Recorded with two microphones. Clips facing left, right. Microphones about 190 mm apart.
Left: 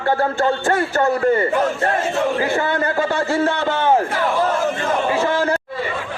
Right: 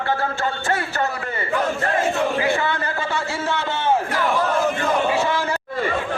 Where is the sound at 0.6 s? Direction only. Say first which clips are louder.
Left 6 dB; 50° left (ahead or behind).